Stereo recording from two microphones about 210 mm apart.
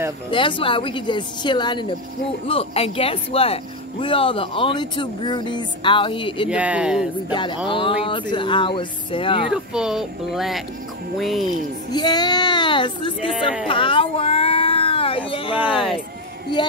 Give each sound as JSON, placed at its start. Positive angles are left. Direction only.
{"t": 0.3, "sound": "speech", "side_deg": 25}
{"t": 6.5, "sound": "speech", "side_deg": -5}
{"t": 7.2, "sound": "speech", "side_deg": 20}
{"t": 9.5, "sound": "speech", "side_deg": -5}
{"t": 11.9, "sound": "speech", "side_deg": 20}
{"t": 13.7, "sound": "a sound", "side_deg": 25}